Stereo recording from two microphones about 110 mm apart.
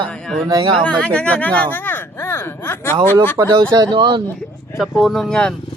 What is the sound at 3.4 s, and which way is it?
Speech, 35° right (ahead or behind).